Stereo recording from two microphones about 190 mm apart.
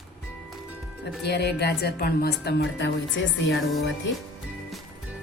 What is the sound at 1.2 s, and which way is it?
A woman's voice, 60° left (ahead or behind).